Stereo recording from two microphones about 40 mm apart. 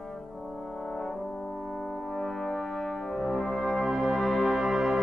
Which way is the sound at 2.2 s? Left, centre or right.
Centre.